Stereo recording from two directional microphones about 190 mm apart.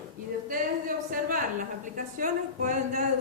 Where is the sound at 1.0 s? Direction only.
45° right (ahead or behind).